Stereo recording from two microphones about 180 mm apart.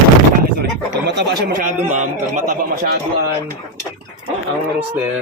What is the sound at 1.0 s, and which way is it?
Speech, 70° right (ahead or behind).